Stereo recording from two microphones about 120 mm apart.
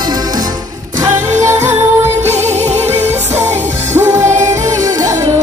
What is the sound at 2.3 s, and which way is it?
Music, 65° right (ahead or behind).